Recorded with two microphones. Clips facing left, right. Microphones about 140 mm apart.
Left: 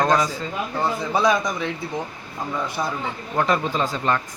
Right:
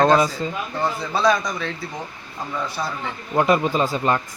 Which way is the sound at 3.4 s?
15° right (ahead or behind).